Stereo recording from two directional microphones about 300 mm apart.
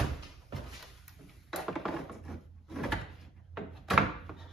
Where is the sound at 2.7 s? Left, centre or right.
Centre.